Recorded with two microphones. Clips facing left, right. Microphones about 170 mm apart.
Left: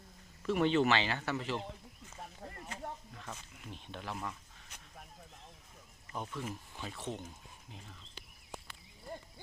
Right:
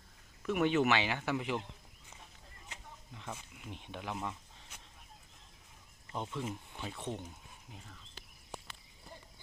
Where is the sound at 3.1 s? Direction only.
15° right (ahead or behind).